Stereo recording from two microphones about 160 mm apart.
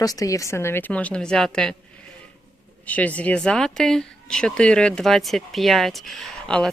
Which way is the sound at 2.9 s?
10° left (ahead or behind).